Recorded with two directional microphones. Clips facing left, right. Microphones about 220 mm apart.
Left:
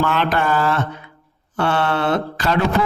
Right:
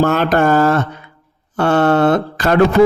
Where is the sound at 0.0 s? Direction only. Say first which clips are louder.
Right 6 dB; 45° right (ahead or behind).